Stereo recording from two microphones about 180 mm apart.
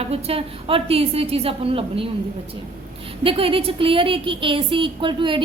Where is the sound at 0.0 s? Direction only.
35° right (ahead or behind).